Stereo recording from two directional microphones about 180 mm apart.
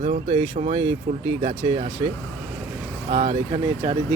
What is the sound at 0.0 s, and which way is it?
Speech, 40° right (ahead or behind).